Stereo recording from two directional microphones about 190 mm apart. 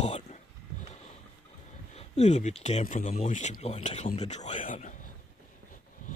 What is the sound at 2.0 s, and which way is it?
Speech, 35° left (ahead or behind).